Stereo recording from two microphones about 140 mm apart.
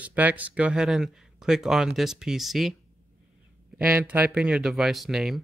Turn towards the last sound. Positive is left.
turn(degrees=0)  # may be behind; listen again after turning